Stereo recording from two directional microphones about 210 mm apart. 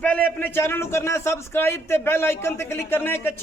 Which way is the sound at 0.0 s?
5° left (ahead or behind).